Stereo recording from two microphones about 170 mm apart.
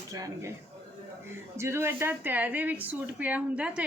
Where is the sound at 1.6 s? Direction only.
15° right (ahead or behind).